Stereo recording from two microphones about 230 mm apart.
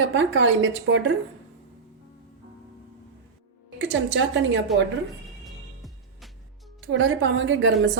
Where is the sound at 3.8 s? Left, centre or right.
Right.